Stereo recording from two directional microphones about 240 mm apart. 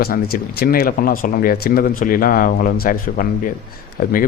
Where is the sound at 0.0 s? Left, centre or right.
Left.